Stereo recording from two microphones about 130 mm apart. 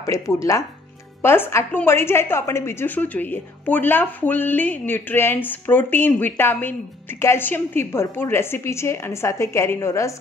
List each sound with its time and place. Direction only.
0.0 s a woman's voice: 25° left (ahead or behind)